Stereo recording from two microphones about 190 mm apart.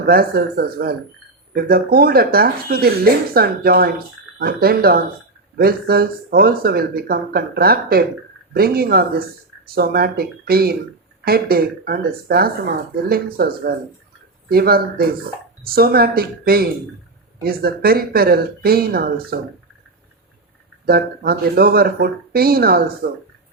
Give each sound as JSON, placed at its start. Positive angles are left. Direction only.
{"t": 0.0, "sound": "speech", "side_deg": -50}
{"t": 20.8, "sound": "speech", "side_deg": -55}